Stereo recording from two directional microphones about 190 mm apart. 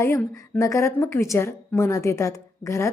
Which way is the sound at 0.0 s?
15° left (ahead or behind).